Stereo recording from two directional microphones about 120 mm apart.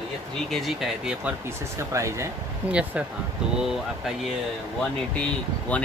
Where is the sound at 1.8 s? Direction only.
25° right (ahead or behind).